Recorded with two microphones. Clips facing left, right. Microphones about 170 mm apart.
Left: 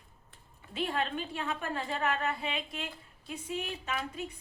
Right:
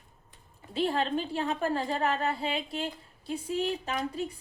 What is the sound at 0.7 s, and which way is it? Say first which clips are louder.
A woman's voice: right 5 dB; 30° right (ahead or behind).